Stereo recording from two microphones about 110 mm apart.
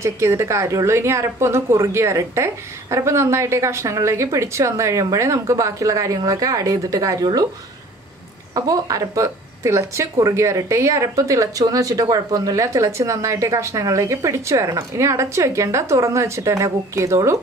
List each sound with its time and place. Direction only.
0.0 s speech: 25° right (ahead or behind)
8.5 s speech: 35° right (ahead or behind)